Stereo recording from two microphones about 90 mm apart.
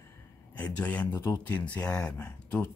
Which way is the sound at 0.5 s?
15° left (ahead or behind).